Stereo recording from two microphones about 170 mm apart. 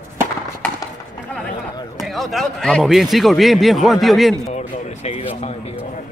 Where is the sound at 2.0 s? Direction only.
Centre (ahead or behind).